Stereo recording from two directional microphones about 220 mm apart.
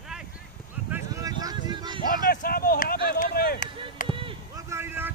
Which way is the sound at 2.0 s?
40° left (ahead or behind).